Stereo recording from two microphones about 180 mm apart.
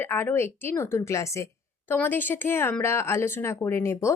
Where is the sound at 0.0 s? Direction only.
10° left (ahead or behind).